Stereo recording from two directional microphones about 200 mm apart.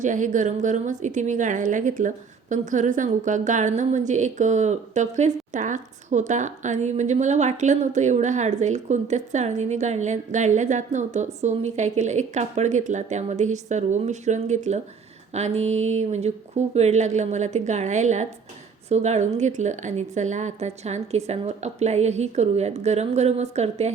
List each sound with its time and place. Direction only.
0.0 s a woman's voice: 40° right (ahead or behind)